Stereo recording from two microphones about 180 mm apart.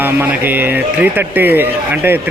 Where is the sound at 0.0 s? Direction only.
10° right (ahead or behind).